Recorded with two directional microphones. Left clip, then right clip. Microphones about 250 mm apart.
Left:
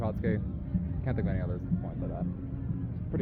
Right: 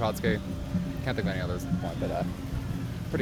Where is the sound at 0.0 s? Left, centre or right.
Centre.